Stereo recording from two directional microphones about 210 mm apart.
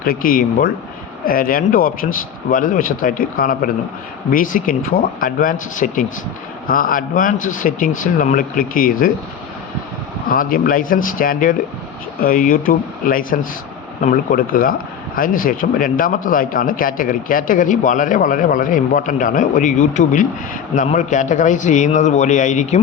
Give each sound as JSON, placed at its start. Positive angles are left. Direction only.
{"t": 0.0, "sound": "speech", "side_deg": 45}
{"t": 10.2, "sound": "speech", "side_deg": 45}